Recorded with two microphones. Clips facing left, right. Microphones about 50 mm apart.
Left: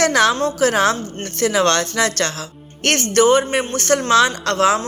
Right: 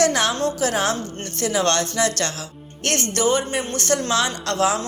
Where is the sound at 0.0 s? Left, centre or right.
Left.